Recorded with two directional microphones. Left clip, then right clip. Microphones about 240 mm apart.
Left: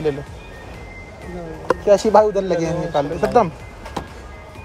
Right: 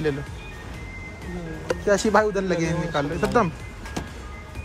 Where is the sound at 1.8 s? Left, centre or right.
Centre.